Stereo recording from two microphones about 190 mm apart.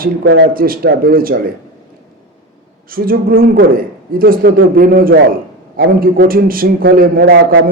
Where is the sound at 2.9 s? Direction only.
50° right (ahead or behind).